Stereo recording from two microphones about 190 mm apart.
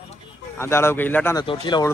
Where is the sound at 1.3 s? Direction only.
20° left (ahead or behind).